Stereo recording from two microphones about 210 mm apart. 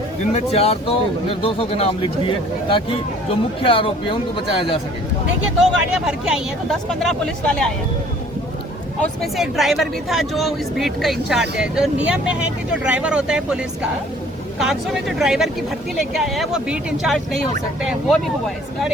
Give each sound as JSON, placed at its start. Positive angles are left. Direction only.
{"t": 0.3, "sound": "speech", "side_deg": 30}
{"t": 5.5, "sound": "speech", "side_deg": -5}
{"t": 9.2, "sound": "speech", "side_deg": 0}